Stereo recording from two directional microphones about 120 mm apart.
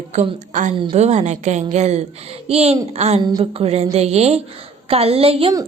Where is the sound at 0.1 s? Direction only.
80° right.